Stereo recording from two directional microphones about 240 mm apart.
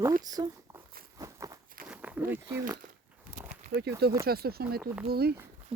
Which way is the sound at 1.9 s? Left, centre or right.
Centre.